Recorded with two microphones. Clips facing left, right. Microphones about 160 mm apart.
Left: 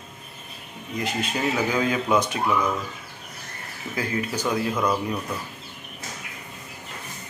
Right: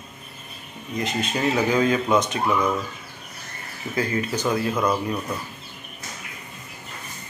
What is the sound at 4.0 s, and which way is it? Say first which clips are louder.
Speech: right 3 dB; 10° left (ahead or behind).